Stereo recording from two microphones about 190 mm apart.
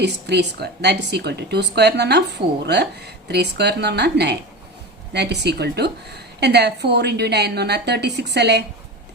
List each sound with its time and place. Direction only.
0.0 s a woman's voice: 60° right (ahead or behind)